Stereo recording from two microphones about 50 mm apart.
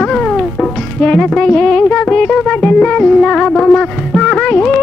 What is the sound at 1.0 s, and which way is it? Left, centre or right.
Music, centre.